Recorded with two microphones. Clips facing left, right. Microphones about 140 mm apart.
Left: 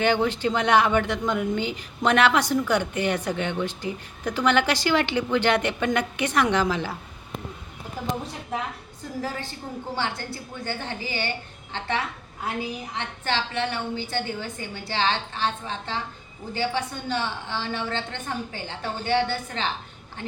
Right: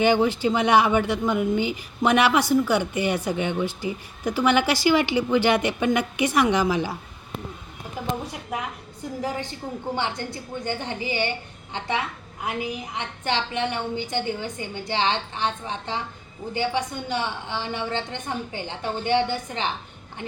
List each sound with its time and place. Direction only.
0.0 s a woman's voice: 10° right (ahead or behind)
9.2 s a woman's voice: 15° right (ahead or behind)